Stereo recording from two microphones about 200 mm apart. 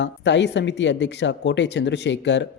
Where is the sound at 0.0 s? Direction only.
60° left (ahead or behind).